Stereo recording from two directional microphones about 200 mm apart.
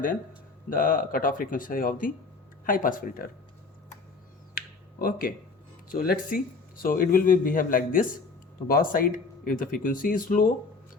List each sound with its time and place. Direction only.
0.7 s speech: 45° left (ahead or behind)
4.9 s speech: 45° left (ahead or behind)